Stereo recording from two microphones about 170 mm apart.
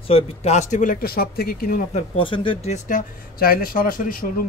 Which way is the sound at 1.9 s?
30° left (ahead or behind).